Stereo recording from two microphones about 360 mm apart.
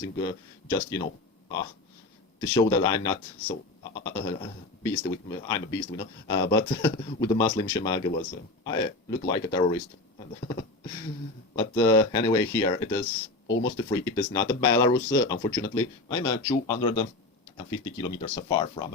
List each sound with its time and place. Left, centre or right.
0.2 s speech: centre
2.5 s speech: centre
13.5 s speech: left
13.7 s speech: centre